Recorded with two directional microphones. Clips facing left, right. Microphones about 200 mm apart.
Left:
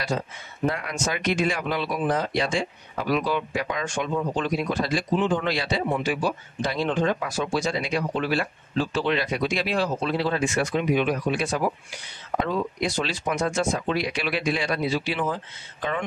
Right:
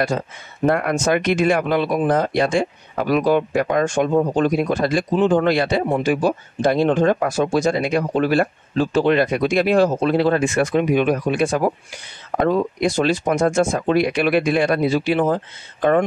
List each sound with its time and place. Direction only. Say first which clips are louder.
0.7 s speech: right 9 dB; 55° right (ahead or behind)